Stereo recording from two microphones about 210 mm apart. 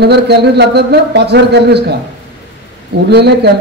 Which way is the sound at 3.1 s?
50° right (ahead or behind).